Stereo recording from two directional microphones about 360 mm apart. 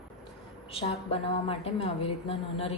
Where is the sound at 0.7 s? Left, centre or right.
Centre.